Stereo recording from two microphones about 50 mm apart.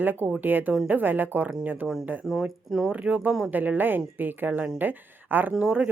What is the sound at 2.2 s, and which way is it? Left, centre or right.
Speech, centre.